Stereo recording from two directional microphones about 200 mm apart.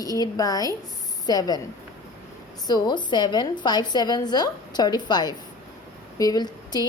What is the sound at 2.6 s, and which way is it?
A woman's voice, 20° left (ahead or behind).